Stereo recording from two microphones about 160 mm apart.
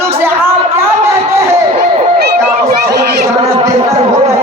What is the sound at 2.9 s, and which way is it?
Speech, 90° right.